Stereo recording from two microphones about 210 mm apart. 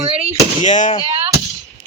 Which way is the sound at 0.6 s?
35° left (ahead or behind).